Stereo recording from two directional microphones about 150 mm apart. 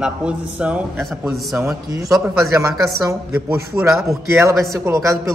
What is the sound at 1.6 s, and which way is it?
A woman's voice, 20° right (ahead or behind).